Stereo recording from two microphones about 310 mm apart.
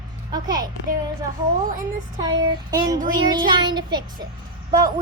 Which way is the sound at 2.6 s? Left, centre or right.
Centre.